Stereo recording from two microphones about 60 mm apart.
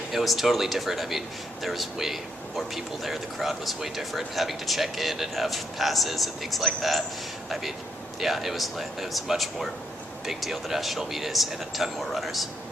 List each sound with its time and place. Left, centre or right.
0.1 s speech: centre
8.2 s speech: centre